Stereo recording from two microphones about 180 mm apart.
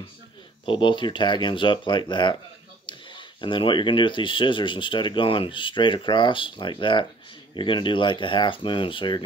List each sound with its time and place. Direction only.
0.7 s speech: 25° left (ahead or behind)